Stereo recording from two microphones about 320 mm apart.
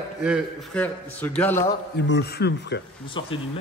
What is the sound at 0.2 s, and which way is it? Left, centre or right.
A man's voice, centre.